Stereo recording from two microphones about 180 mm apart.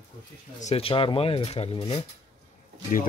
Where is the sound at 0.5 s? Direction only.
35° left (ahead or behind).